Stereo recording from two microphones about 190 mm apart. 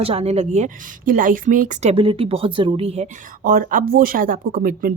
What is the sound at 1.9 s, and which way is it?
Speech, 30° right (ahead or behind).